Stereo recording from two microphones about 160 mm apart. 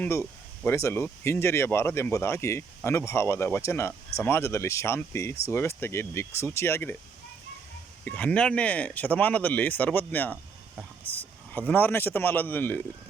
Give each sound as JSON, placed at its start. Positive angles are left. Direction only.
{"t": 0.0, "sound": "speech", "side_deg": 15}
{"t": 8.0, "sound": "speech", "side_deg": 10}